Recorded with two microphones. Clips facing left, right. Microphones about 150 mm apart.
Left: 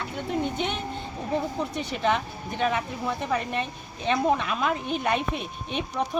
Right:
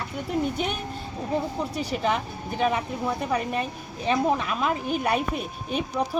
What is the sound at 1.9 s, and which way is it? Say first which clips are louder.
Speech: left 1 dB; 5° right (ahead or behind).